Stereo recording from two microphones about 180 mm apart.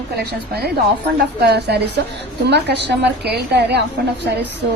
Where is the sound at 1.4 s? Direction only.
65° right (ahead or behind).